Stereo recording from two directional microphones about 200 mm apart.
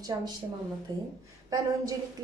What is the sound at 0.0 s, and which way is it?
A woman's voice, 20° right (ahead or behind).